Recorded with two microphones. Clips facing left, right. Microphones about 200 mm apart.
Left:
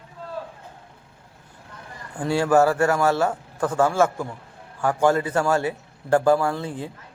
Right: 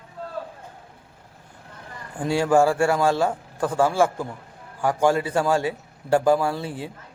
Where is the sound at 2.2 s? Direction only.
15° right (ahead or behind).